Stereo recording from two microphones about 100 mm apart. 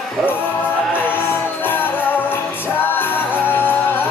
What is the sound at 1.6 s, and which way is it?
Music, 20° left (ahead or behind).